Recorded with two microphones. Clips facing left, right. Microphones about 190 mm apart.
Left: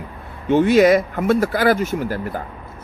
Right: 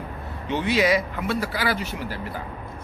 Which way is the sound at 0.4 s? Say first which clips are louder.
Left 9 dB; 50° left (ahead or behind).